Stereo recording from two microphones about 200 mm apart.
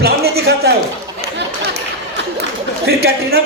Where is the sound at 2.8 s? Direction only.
55° right (ahead or behind).